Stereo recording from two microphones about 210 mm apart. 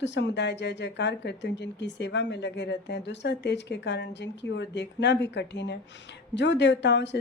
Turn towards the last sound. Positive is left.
turn(degrees=55)  # may be behind; listen again after turning